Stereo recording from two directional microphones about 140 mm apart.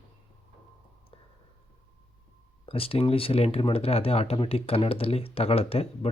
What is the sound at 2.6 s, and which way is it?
Speech, 45° left (ahead or behind).